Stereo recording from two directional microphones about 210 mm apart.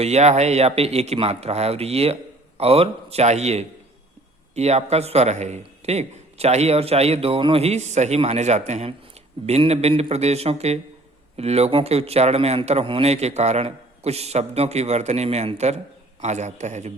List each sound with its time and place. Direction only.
0.0 s a man's voice: 30° right (ahead or behind)